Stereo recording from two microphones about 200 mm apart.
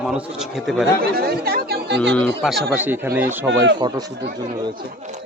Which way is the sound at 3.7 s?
20° right (ahead or behind).